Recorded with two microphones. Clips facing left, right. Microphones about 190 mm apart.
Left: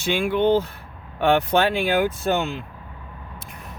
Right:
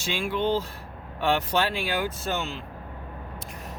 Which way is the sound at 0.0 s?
60° left (ahead or behind).